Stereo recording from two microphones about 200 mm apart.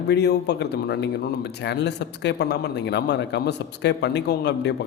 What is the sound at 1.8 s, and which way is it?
A man's voice, 60° left (ahead or behind).